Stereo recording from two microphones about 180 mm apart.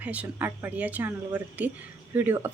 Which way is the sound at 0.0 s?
10° right (ahead or behind).